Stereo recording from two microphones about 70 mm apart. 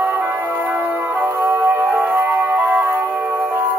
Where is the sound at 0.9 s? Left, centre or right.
Right.